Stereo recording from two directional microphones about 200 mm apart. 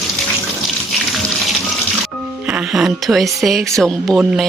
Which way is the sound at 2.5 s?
5° right (ahead or behind).